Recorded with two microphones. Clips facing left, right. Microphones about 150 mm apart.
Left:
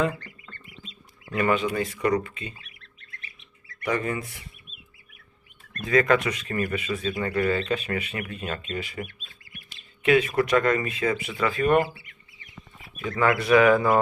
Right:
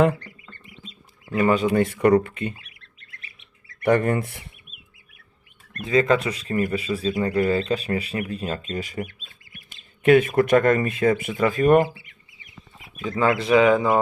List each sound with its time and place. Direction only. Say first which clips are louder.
1.3 s speech: right 4 dB; 25° right (ahead or behind)
1.7 s speech: right 7 dB; 55° right (ahead or behind)
3.8 s speech: right 7 dB; 55° right (ahead or behind)
5.8 s speech: right 1 dB; 25° right (ahead or behind); by 11.9 s 45° right (ahead or behind)
13.0 s speech: right 2 dB; 25° right (ahead or behind)